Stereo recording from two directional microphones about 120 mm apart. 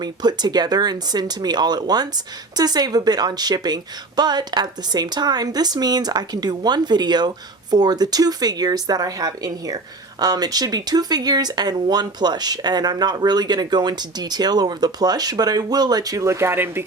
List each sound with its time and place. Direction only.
0.0 s speech: 35° right (ahead or behind); by 16.8 s 20° right (ahead or behind)